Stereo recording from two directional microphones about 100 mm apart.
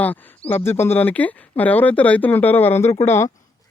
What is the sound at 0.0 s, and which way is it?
Speech, 15° left (ahead or behind).